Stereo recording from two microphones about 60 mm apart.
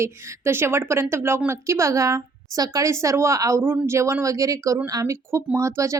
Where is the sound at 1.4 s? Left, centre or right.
Right.